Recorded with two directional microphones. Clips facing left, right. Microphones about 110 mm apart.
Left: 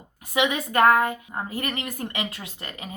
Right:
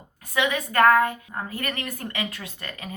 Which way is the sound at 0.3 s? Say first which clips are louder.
Even; 20° left (ahead or behind).